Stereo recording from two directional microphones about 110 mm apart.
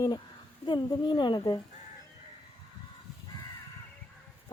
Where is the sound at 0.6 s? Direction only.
45° left (ahead or behind).